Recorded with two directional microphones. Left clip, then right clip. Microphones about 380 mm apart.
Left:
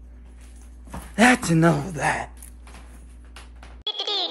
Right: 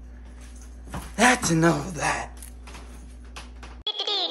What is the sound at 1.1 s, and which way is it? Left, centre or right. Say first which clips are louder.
Speech: left 2 dB; centre.